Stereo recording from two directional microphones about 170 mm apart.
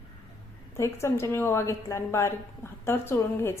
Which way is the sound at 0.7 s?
15° left (ahead or behind).